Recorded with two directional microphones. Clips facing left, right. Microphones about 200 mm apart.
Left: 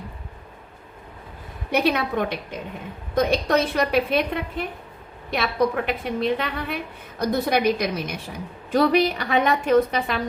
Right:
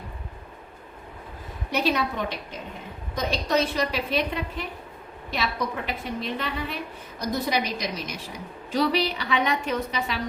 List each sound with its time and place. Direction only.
1.7 s a woman's voice: 55° left (ahead or behind)